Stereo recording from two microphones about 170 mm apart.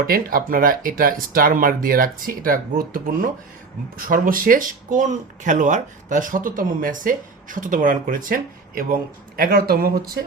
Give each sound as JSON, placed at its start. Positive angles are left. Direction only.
{"t": 0.1, "sound": "speech", "side_deg": -55}